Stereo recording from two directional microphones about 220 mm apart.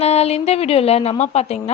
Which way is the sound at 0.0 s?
30° left (ahead or behind).